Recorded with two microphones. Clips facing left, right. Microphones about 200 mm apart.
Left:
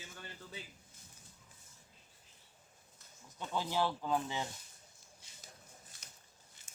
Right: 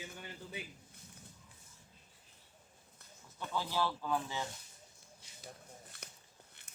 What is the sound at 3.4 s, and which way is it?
A man's voice, 15° left (ahead or behind).